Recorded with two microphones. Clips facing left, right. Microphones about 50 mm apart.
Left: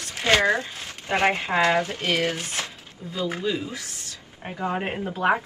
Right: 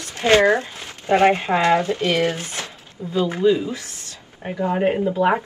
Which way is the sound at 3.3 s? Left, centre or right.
Right.